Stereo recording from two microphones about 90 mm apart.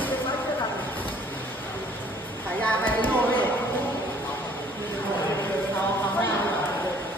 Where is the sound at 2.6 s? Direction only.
20° left (ahead or behind).